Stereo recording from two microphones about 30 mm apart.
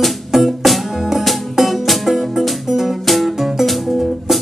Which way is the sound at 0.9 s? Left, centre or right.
Centre.